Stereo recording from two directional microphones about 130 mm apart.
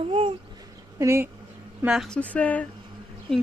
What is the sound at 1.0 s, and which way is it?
Speech, 20° right (ahead or behind).